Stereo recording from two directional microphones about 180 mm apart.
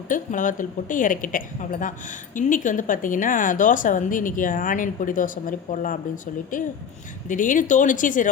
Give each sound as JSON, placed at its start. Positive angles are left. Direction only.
{"t": 0.1, "sound": "speech", "side_deg": 45}